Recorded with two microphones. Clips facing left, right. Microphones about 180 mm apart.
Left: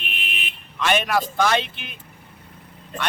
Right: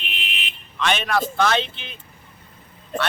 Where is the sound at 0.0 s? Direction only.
50° left (ahead or behind).